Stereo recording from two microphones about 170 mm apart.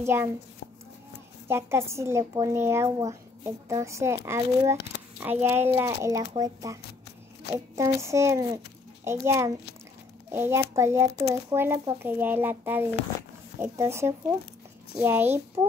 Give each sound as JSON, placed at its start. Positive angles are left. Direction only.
{"t": 0.0, "sound": "a woman's voice", "side_deg": -15}
{"t": 1.5, "sound": "a woman's voice", "side_deg": -15}